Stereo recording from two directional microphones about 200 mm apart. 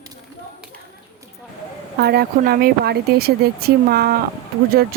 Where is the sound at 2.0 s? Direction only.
50° right (ahead or behind).